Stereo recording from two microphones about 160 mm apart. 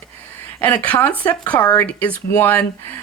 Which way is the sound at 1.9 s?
10° left (ahead or behind).